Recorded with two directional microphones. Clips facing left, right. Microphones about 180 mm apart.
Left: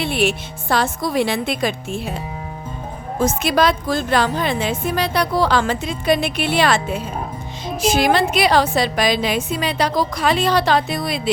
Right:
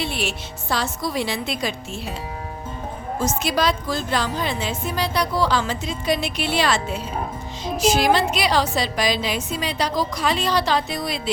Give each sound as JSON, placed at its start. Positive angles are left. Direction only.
{"t": 0.0, "sound": "a woman's voice", "side_deg": 55}
{"t": 3.2, "sound": "a woman's voice", "side_deg": 55}